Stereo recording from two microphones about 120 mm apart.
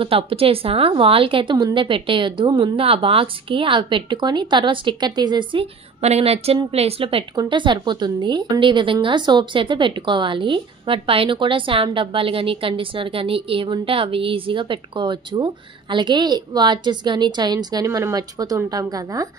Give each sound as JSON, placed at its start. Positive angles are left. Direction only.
{"t": 0.0, "sound": "a woman's voice", "side_deg": -50}